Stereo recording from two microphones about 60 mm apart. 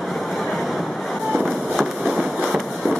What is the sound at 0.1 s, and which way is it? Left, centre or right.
Vehicle, centre.